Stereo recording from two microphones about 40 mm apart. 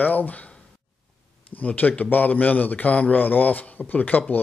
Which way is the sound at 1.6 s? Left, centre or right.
Left.